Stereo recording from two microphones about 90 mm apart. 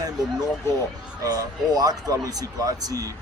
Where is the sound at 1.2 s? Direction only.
45° right (ahead or behind).